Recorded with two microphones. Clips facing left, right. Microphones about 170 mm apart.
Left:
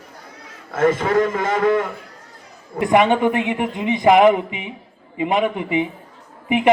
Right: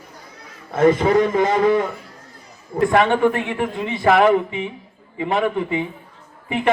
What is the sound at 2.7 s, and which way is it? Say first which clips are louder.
A man's voice: left 1 dB; 15° left (ahead or behind).